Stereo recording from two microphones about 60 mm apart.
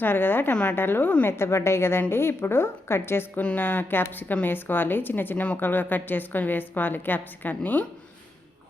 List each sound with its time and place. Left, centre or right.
0.0 s a woman's voice: left
0.5 s a woman's voice: left
0.8 s a woman's voice: left
3.4 s a woman's voice: left